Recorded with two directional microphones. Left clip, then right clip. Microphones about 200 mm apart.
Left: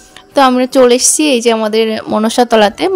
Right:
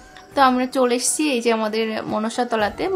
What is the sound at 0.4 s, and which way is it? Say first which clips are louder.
A woman's voice: left 9 dB; 35° left (ahead or behind).